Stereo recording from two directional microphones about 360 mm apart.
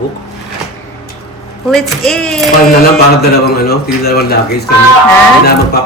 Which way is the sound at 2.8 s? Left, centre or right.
Left.